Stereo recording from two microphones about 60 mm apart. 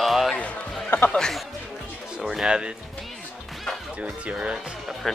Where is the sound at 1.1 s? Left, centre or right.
Centre.